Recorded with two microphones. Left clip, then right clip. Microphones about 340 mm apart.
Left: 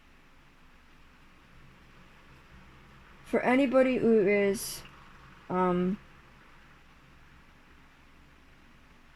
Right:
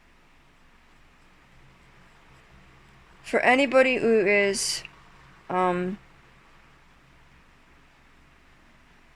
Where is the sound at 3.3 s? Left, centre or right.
Right.